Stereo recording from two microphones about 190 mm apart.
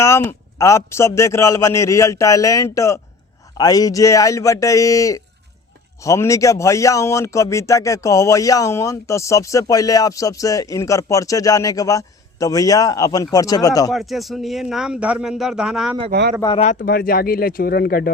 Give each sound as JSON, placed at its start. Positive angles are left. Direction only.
{"t": 0.0, "sound": "speech", "side_deg": 15}
{"t": 13.9, "sound": "speech", "side_deg": 0}
{"t": 16.6, "sound": "speech", "side_deg": 40}
{"t": 16.8, "sound": "speech", "side_deg": 50}